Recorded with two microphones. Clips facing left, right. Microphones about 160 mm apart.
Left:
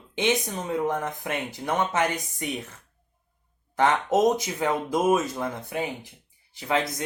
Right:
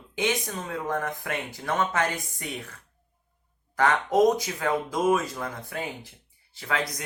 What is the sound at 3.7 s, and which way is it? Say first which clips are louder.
Speech: left 1 dB; 25° left (ahead or behind).